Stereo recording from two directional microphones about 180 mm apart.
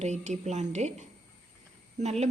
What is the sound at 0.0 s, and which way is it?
A woman's voice, 40° right (ahead or behind).